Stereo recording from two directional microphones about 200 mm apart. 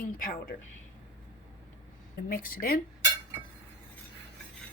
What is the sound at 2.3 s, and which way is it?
Speech, 45° left (ahead or behind).